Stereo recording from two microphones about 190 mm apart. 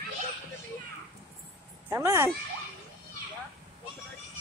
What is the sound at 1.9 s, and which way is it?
Speech, 15° right (ahead or behind).